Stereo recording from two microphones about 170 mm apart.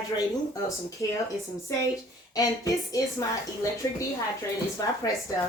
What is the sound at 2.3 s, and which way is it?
Speech, 20° left (ahead or behind).